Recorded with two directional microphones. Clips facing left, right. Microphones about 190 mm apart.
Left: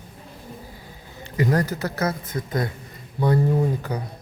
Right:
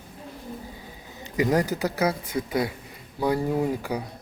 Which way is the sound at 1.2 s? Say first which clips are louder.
Even; 15° right (ahead or behind).